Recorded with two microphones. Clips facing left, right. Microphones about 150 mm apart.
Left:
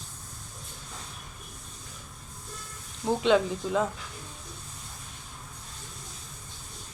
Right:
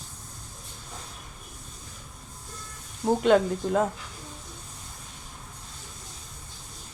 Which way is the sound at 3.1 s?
50° right (ahead or behind).